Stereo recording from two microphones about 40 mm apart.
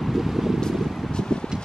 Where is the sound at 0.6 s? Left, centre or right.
Centre.